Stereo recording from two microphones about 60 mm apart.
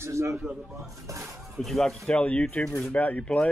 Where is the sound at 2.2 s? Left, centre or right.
Left.